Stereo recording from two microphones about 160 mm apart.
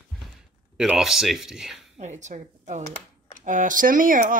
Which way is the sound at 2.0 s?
45° right (ahead or behind).